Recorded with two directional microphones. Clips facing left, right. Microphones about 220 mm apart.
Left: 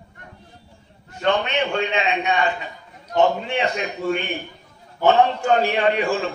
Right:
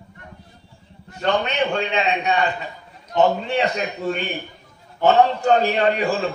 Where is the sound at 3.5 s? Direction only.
35° right (ahead or behind).